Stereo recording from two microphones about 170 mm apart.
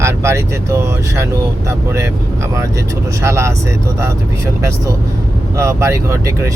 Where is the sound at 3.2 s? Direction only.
15° right (ahead or behind).